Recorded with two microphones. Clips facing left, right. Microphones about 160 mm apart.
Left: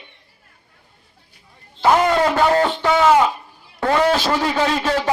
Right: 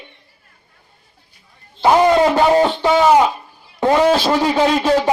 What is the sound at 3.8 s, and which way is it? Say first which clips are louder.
A man's voice: right 4 dB; 20° right (ahead or behind).